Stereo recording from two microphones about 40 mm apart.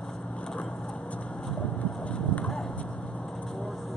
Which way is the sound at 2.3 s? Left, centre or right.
Left.